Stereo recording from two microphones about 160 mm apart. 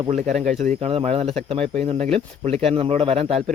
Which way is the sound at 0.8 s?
40° right (ahead or behind).